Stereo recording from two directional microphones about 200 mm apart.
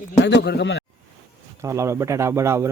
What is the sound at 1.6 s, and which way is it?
Speech, 15° right (ahead or behind).